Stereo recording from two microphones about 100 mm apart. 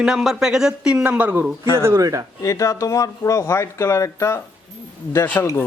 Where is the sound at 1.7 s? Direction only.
25° right (ahead or behind).